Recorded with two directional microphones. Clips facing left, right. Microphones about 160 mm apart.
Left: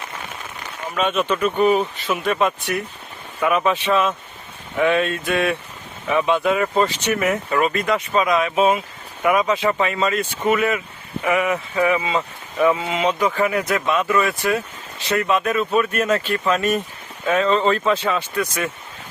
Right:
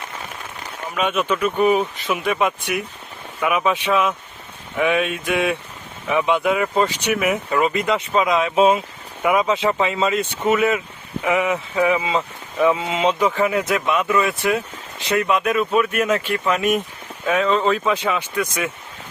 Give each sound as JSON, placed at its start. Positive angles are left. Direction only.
{"t": 0.9, "sound": "speech", "side_deg": -10}